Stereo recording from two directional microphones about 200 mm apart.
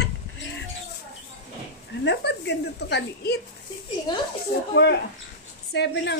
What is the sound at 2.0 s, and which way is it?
A woman's voice, 60° left (ahead or behind).